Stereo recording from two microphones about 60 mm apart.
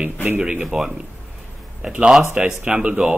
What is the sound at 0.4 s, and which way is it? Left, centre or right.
Speech, centre.